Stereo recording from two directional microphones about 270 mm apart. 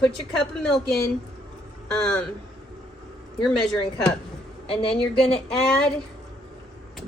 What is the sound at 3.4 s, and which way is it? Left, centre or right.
Speech, centre.